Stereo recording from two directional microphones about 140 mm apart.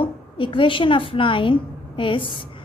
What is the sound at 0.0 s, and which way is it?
A woman's voice, 40° left (ahead or behind).